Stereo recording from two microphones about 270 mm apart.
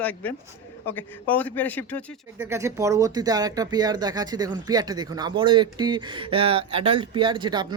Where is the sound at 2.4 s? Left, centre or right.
Centre.